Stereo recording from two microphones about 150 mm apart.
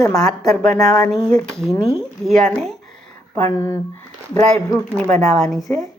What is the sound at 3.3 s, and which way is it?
Speech, 20° left (ahead or behind).